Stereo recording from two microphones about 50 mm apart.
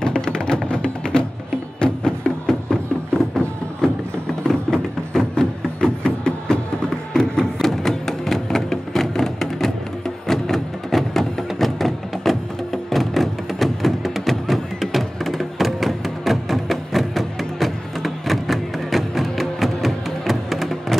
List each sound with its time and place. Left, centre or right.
0.0 s music: centre